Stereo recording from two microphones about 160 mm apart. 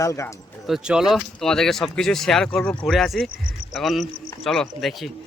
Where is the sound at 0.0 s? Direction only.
20° left (ahead or behind).